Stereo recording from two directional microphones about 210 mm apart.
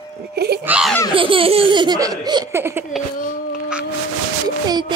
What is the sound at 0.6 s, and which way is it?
Baby laughter, 5° right (ahead or behind).